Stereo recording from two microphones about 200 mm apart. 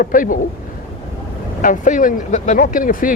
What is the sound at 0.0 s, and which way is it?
Speech, 45° left (ahead or behind).